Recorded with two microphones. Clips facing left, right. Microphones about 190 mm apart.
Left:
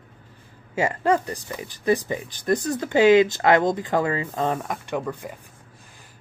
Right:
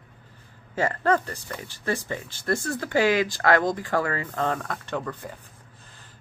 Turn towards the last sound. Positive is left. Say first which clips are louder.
# left 3 dB
turn(degrees=10)  # may be behind; listen again after turning